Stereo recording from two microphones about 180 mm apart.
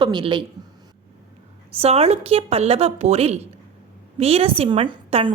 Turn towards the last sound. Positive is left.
turn(degrees=-30)  # may be behind; listen again after turning